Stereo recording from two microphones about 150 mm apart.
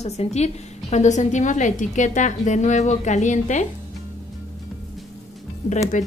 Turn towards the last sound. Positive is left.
turn(degrees=55)  # may be behind; listen again after turning